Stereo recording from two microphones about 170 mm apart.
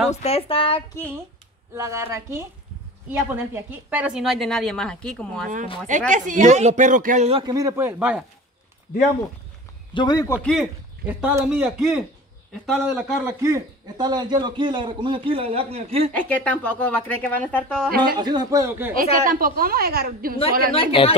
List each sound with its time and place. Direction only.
0.1 s speech: 40° left (ahead or behind)
1.8 s a woman's voice: 15° right (ahead or behind); by 5.5 s 5° left (ahead or behind)
5.9 s speech: 50° right (ahead or behind)
7.2 s a man's voice: 30° right (ahead or behind)
7.5 s speech: 15° right (ahead or behind)
9.9 s a man's voice: 25° left (ahead or behind)
10.4 s a woman's voice: centre (ahead or behind)
11.1 s a woman's voice: 10° right (ahead or behind)
13.2 s a man's voice: 20° right (ahead or behind); by 16.1 s 35° right (ahead or behind)
16.2 s speech: 10° left (ahead or behind)
18.1 s a man's voice: 25° right (ahead or behind)
19.2 s a woman's voice: 55° right (ahead or behind)
20.7 s speech: 35° left (ahead or behind)